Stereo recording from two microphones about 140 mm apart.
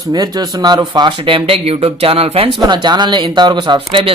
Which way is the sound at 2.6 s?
30° right (ahead or behind).